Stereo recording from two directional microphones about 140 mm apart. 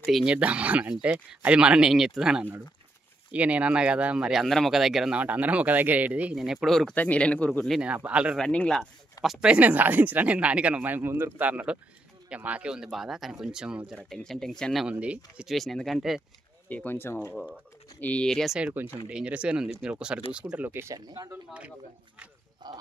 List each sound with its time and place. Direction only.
0.0 s speech: 5° right (ahead or behind)
7.8 s speech: 10° right (ahead or behind)
8.4 s speech: 5° left (ahead or behind)
16.6 s speech: 10° left (ahead or behind); by 21.7 s 10° right (ahead or behind)
22.6 s speech: 30° right (ahead or behind)